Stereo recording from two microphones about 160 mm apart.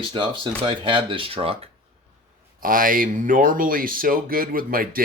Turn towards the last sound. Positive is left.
turn(degrees=-65)  # may be behind; listen again after turning